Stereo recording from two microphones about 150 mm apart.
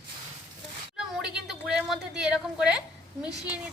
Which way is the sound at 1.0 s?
5° right (ahead or behind).